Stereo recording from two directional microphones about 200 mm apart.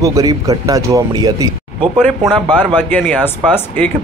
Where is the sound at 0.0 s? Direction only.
15° right (ahead or behind).